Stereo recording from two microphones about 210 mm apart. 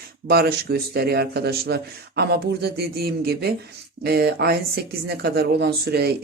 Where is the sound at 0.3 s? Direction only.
50° right (ahead or behind).